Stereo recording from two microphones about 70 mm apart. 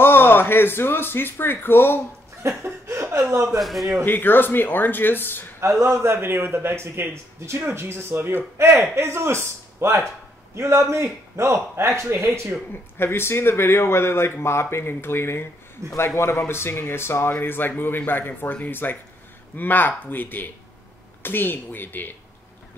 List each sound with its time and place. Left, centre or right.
0.0 s speech: left
2.4 s a man's voice: right
3.5 s a man's voice: centre
4.0 s speech: left
5.6 s a man's voice: right
12.9 s speech: left
15.8 s a man's voice: right
16.2 s speech: left